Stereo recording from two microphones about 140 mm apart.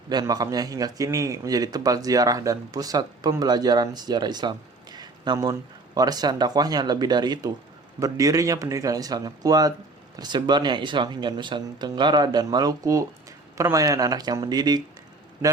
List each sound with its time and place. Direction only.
0.1 s a man's voice: 30° right (ahead or behind)